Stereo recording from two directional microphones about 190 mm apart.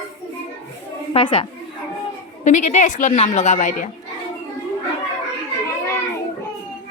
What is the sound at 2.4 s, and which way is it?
Speech, 40° left (ahead or behind).